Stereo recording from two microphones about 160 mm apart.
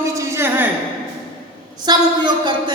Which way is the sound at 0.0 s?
20° right (ahead or behind).